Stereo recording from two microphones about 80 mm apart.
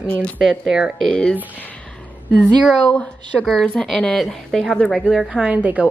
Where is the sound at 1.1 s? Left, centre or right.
Centre.